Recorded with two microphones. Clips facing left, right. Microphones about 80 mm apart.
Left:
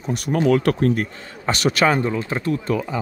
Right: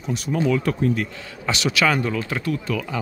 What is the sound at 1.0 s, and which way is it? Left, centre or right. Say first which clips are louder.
Speech: left 2 dB; left.